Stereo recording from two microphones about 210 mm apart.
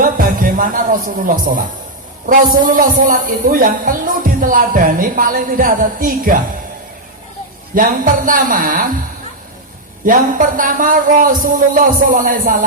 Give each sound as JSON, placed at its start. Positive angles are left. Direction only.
{"t": 0.0, "sound": "a woman's voice", "side_deg": -40}
{"t": 7.8, "sound": "a woman's voice", "side_deg": -40}
{"t": 10.1, "sound": "a woman's voice", "side_deg": -40}